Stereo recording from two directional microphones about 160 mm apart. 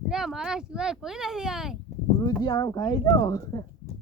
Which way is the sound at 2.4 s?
25° left (ahead or behind).